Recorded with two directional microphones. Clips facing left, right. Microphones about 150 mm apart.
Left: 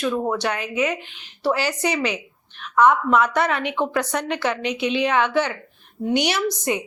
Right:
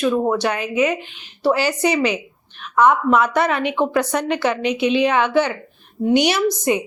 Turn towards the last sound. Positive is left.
turn(degrees=-10)  # may be behind; listen again after turning